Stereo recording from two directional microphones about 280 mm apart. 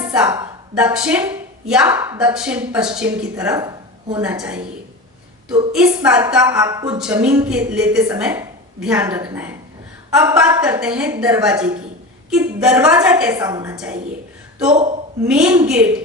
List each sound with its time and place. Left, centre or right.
0.0 s a sound: centre
0.3 s a woman's voice: centre
5.7 s a woman's voice: centre
15.3 s a woman's voice: centre